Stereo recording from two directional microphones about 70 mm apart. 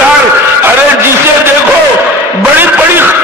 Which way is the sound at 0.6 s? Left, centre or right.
Right.